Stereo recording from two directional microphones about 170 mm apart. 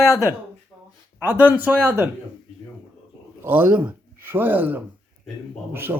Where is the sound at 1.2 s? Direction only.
10° right (ahead or behind).